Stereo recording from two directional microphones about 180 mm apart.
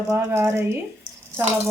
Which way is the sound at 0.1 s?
10° right (ahead or behind).